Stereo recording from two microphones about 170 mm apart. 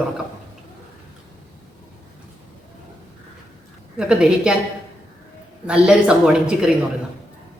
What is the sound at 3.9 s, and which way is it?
Speech, 5° right (ahead or behind).